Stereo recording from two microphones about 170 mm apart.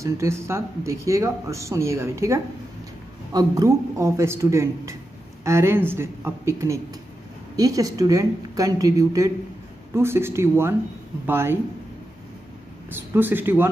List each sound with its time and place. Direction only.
0.0 s speech: 15° right (ahead or behind)
12.9 s speech: 10° right (ahead or behind)